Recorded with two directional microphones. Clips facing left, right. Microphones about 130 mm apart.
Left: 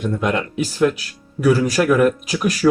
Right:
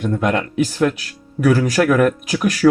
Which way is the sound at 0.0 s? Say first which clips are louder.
Right 2 dB; 50° right (ahead or behind).